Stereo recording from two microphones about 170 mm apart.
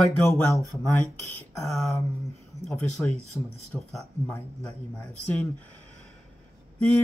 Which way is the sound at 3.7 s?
Centre (ahead or behind).